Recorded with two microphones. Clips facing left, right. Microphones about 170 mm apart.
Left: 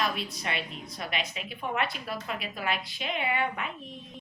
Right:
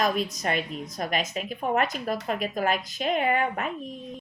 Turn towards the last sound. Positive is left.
turn(degrees=-45)  # may be behind; listen again after turning